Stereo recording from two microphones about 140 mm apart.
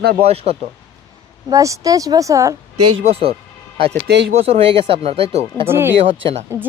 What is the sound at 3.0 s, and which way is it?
Speech, 45° right (ahead or behind).